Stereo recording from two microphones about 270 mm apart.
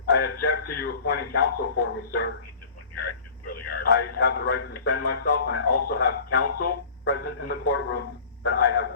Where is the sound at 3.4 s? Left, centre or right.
Left.